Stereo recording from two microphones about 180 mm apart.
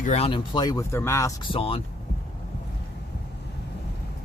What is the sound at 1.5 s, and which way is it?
Speech, 30° left (ahead or behind).